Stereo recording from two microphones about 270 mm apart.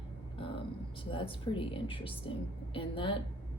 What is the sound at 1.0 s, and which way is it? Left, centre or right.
A woman's voice, centre.